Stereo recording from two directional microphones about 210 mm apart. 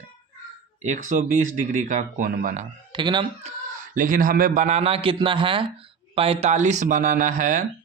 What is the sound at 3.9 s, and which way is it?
Speech, 40° right (ahead or behind).